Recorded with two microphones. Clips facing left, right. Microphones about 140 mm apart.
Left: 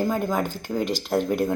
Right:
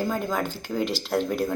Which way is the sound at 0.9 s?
45° left (ahead or behind).